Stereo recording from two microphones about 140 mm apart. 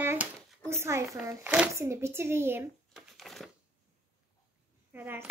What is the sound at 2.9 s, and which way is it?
Crumpling, centre (ahead or behind).